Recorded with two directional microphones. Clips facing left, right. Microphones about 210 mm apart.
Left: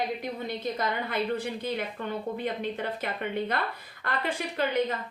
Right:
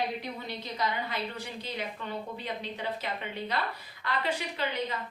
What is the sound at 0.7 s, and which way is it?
A woman's voice, 55° left (ahead or behind).